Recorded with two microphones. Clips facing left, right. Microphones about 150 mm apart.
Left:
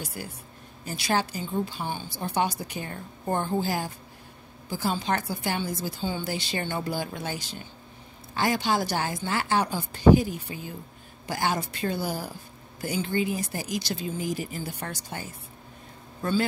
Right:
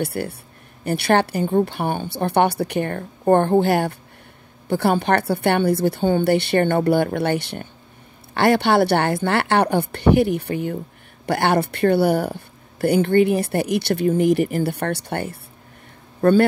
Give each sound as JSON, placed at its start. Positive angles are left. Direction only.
{"t": 0.0, "sound": "a man's voice", "side_deg": -65}